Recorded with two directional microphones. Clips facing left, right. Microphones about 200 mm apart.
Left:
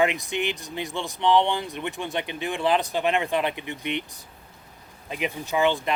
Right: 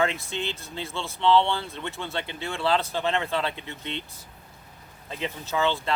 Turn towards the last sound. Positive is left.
turn(degrees=15)  # may be behind; listen again after turning